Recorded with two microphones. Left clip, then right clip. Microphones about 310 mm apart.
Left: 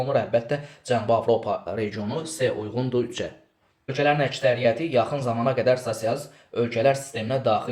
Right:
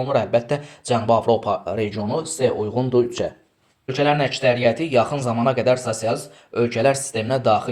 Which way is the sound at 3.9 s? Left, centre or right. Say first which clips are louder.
Right 3 dB; right.